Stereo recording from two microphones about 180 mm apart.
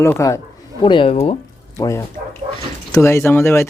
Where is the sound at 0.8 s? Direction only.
25° left (ahead or behind).